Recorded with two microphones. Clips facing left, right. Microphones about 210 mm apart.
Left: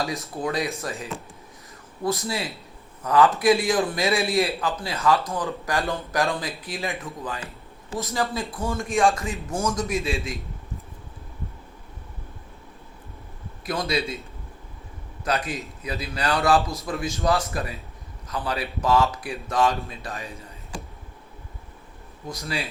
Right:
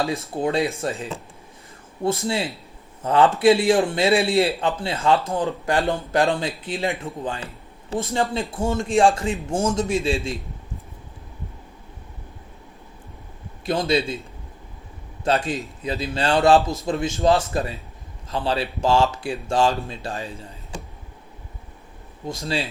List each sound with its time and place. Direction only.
0.0 s a man's voice: 30° right (ahead or behind)
13.7 s a man's voice: 30° right (ahead or behind)
15.4 s a man's voice: 30° right (ahead or behind)
22.3 s a man's voice: 30° right (ahead or behind)